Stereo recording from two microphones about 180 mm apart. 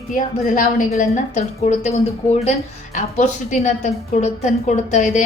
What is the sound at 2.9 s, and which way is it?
A woman's voice, 40° left (ahead or behind).